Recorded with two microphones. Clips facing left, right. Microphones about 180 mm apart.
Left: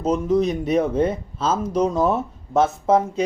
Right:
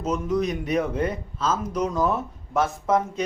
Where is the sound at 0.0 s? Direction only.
30° left (ahead or behind).